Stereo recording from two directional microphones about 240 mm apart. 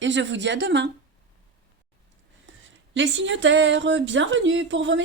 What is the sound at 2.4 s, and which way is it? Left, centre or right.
Speech, right.